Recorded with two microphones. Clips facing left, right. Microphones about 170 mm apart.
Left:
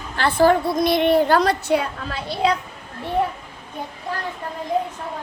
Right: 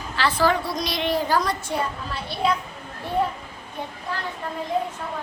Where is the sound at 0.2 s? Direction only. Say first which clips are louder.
Left 5 dB; 55° left (ahead or behind).